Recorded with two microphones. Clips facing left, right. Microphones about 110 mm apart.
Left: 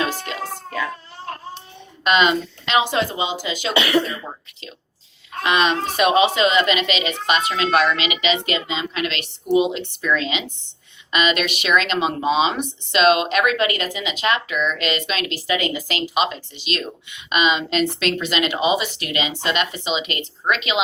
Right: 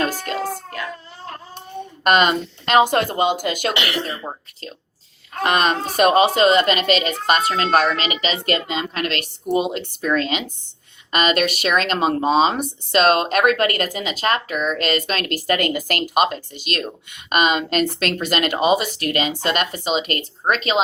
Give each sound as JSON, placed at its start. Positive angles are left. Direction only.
{"t": 0.0, "sound": "music", "side_deg": -45}
{"t": 2.0, "sound": "speech", "side_deg": -50}
{"t": 5.4, "sound": "speech", "side_deg": -45}